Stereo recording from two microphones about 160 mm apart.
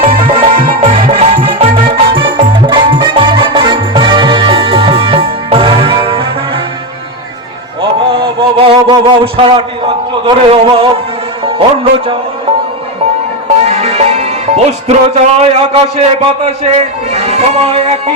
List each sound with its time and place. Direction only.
0.3 s music: 35° right (ahead or behind)
7.8 s a sound: 35° right (ahead or behind)
13.7 s music: 45° right (ahead or behind)